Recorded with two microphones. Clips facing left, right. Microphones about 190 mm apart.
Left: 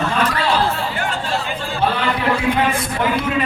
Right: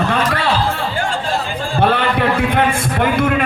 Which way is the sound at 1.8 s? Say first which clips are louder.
Right 4 dB; 60° right (ahead or behind).